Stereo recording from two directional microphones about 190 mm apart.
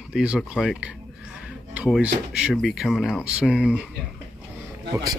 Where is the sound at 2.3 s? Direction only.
5° right (ahead or behind).